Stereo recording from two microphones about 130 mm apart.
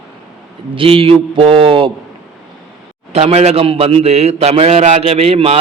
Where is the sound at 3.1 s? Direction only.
55° right (ahead or behind).